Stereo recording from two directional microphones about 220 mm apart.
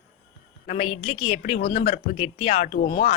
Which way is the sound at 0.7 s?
25° left (ahead or behind).